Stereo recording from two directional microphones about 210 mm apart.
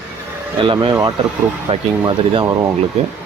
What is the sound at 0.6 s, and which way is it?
Speech, 25° right (ahead or behind).